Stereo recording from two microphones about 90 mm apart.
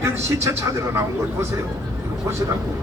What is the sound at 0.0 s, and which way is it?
A man's voice, 30° right (ahead or behind).